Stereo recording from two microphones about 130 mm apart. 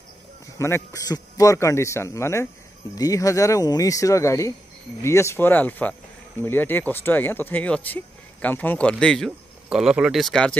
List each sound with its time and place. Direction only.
0.6 s speech: 20° left (ahead or behind)